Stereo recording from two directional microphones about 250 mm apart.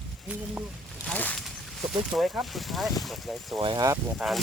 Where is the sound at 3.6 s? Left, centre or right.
Centre.